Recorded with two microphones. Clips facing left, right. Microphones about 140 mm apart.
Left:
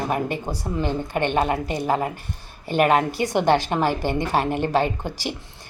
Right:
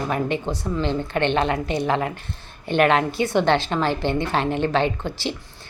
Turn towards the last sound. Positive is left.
turn(degrees=10)  # may be behind; listen again after turning